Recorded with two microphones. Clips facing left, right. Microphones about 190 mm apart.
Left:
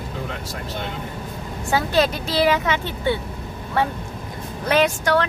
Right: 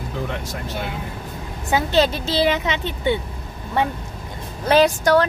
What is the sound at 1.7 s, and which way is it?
A woman's voice, 25° right (ahead or behind).